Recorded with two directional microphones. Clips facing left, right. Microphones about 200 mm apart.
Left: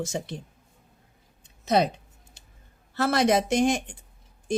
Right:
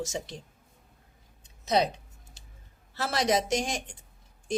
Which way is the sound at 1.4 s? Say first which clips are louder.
Left 3 dB; 60° left (ahead or behind).